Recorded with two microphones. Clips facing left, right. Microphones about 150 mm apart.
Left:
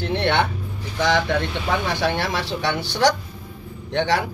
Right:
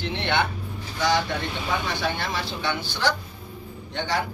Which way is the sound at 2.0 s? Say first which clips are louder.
Left 5 dB; 90° left.